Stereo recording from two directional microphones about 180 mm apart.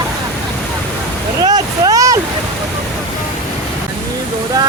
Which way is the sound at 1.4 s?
20° right (ahead or behind).